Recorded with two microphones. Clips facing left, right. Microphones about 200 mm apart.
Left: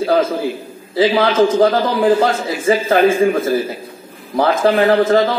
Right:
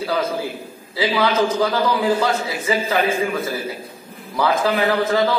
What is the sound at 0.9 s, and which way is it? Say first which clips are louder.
A man's voice: left 6 dB; 50° left (ahead or behind).